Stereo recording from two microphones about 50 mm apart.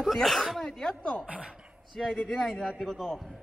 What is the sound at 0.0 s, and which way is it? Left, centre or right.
Speech, centre.